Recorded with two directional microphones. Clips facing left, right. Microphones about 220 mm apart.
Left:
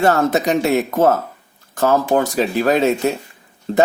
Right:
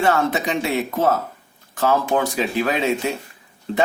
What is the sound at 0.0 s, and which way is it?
Speech, 40° left (ahead or behind).